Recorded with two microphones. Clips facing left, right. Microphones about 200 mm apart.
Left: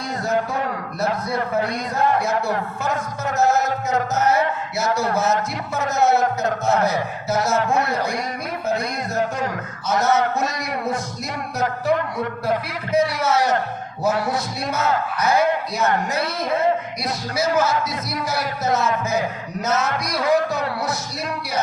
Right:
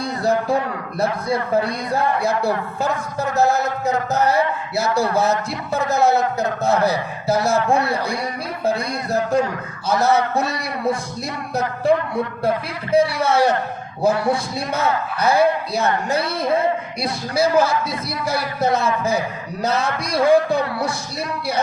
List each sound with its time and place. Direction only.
0.0 s speech: 35° right (ahead or behind)